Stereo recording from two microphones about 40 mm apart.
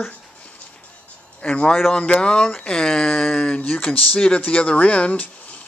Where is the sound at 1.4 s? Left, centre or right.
Left.